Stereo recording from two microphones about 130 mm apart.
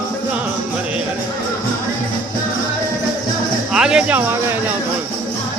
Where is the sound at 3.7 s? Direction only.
5° right (ahead or behind).